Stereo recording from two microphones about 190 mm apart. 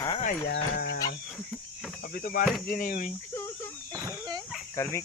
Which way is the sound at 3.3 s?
15° left (ahead or behind).